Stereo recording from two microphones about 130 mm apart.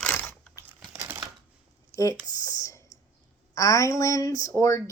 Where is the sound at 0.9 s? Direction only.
20° right (ahead or behind).